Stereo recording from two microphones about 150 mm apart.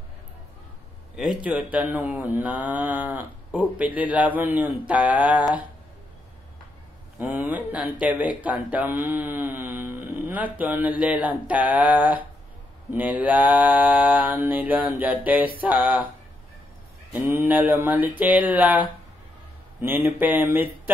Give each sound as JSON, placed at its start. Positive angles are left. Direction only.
{"t": 1.1, "sound": "speech", "side_deg": -5}
{"t": 7.2, "sound": "speech", "side_deg": -10}
{"t": 17.1, "sound": "speech", "side_deg": -15}